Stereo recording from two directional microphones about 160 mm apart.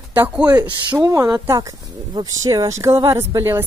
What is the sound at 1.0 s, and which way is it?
Speech, 20° right (ahead or behind).